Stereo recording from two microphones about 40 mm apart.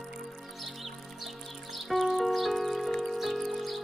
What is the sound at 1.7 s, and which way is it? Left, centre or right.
Music, centre.